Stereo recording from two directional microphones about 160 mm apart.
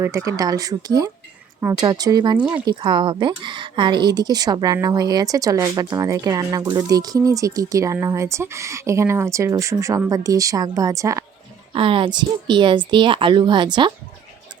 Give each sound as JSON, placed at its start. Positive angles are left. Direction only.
{"t": 0.0, "sound": "speech", "side_deg": -20}
{"t": 11.7, "sound": "speech", "side_deg": -35}